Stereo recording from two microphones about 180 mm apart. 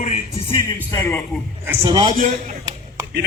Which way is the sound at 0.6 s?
15° left (ahead or behind).